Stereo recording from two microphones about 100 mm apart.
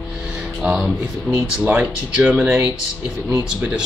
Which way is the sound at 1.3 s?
10° left (ahead or behind).